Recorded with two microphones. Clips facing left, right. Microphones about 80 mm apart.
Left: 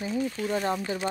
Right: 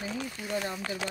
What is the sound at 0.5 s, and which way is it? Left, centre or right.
Speech, left.